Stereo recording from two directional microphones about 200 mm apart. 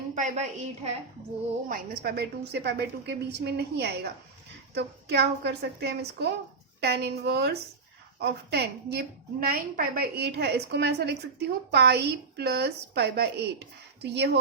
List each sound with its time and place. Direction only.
0.1 s a woman's voice: 35° right (ahead or behind)
1.7 s a woman's voice: 50° right (ahead or behind)